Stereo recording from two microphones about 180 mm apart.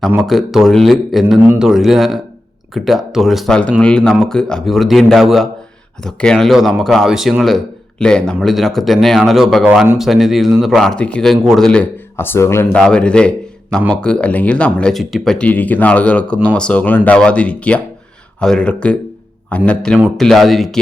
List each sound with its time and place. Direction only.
0.3 s speech: centre (ahead or behind)
9.6 s a man's voice: 10° right (ahead or behind)